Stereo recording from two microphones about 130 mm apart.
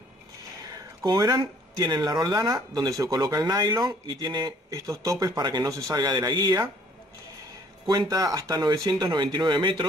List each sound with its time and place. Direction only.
0.7 s speech: 30° right (ahead or behind)
7.8 s speech: 30° right (ahead or behind)